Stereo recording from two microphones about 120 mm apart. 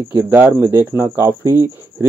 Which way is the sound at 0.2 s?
20° right (ahead or behind).